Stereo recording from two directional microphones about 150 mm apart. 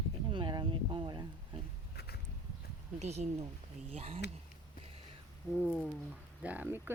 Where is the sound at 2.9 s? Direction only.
50° right (ahead or behind).